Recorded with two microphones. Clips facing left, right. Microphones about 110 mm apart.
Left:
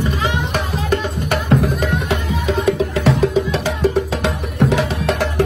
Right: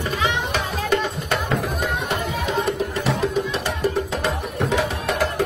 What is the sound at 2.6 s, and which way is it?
Music, 90° left.